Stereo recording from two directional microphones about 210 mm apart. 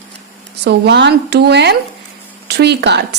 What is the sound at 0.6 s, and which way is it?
A woman's voice, 50° right (ahead or behind).